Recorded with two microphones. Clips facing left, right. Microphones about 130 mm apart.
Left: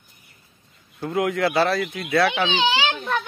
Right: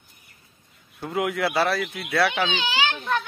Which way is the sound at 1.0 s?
5° right (ahead or behind).